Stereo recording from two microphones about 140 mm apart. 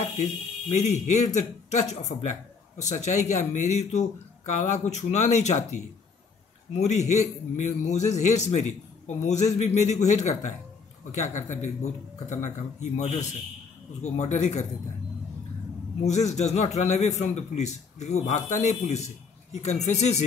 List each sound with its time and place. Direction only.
0.0 s a man's voice: 55° left (ahead or behind)
16.1 s a man's voice: 55° left (ahead or behind)